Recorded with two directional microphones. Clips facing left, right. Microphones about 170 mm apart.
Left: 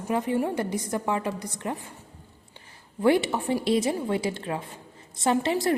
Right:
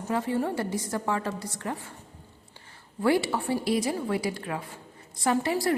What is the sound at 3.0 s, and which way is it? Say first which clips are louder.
A woman's voice: left 2 dB; 20° left (ahead or behind).